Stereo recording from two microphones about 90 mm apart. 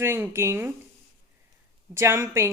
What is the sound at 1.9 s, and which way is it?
Speech, 30° right (ahead or behind).